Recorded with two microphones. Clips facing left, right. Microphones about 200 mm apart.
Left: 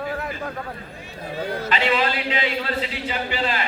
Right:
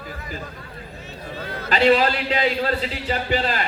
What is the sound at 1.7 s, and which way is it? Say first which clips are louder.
Speech: right 7 dB; 40° right (ahead or behind).